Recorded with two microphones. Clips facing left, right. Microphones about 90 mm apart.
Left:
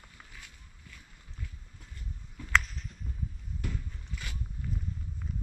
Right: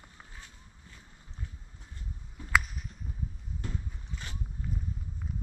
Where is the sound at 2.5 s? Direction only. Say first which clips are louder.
Even; 10° right (ahead or behind).